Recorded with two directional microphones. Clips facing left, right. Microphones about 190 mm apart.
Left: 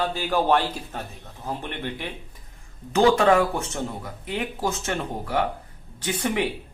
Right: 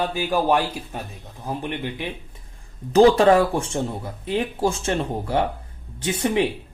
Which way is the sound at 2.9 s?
35° right (ahead or behind).